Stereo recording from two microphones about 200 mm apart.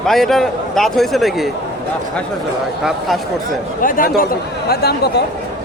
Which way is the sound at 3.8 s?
45° left (ahead or behind).